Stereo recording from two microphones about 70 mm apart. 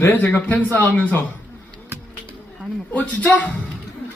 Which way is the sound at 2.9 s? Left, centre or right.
Centre.